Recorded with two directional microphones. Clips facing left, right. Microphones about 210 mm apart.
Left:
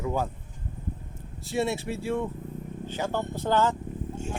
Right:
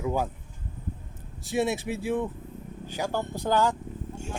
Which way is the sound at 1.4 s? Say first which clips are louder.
Right 1 dB; 15° right (ahead or behind).